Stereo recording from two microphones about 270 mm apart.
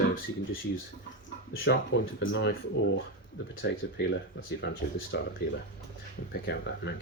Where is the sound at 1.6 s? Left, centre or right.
Left.